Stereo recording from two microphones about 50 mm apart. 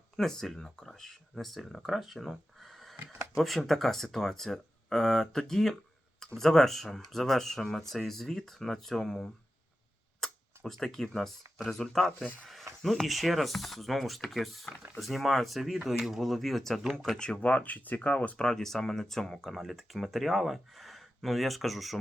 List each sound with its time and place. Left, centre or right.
0.2 s speech: centre
17.2 s speech: left
18.3 s speech: centre